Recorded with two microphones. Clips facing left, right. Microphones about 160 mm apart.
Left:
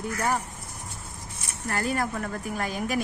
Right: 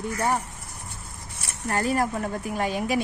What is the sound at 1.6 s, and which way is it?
Speech, 35° right (ahead or behind).